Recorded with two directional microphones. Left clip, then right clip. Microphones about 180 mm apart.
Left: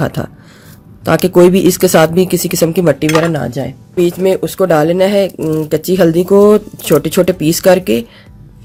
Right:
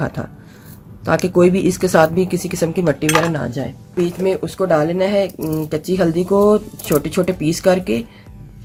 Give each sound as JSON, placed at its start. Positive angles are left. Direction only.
{"t": 0.0, "sound": "speech", "side_deg": 45}